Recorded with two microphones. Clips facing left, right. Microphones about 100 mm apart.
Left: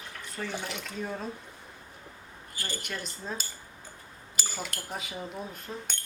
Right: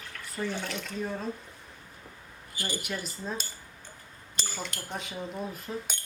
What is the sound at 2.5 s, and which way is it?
Speech, 15° right (ahead or behind).